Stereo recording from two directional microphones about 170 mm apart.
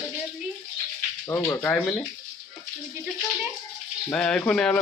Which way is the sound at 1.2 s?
15° left (ahead or behind).